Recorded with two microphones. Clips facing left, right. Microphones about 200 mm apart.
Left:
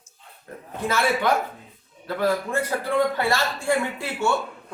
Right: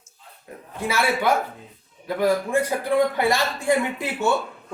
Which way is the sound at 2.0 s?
15° right (ahead or behind).